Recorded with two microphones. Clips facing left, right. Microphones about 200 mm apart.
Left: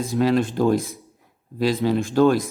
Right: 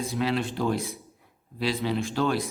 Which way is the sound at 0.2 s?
45° left (ahead or behind).